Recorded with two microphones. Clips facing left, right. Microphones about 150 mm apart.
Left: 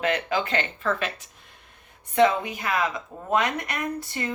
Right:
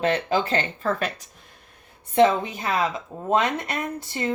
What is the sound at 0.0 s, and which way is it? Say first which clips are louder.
Speech: right 3 dB; 30° right (ahead or behind).